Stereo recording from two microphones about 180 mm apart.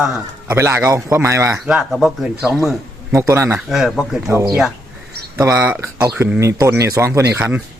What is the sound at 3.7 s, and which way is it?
Speech, centre (ahead or behind).